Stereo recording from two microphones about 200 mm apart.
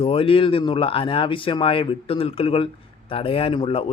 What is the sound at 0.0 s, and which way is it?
Speech, 30° left (ahead or behind).